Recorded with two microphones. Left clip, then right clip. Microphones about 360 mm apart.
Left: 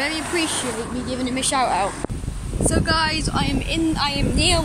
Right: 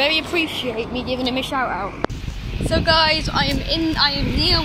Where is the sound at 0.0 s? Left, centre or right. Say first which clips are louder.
Right 4 dB; centre.